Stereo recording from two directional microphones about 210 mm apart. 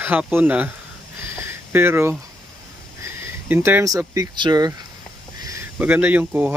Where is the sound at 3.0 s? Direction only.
10° right (ahead or behind).